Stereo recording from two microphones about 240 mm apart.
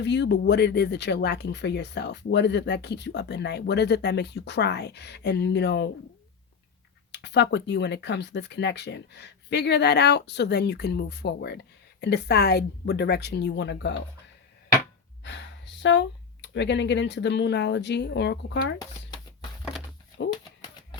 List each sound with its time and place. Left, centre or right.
0.0 s speech: left
7.1 s speech: left
15.2 s speech: left
20.3 s typewriter: centre